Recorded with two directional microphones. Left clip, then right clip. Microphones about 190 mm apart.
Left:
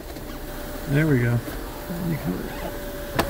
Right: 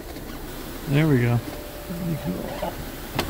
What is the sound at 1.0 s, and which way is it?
Speech, 20° right (ahead or behind).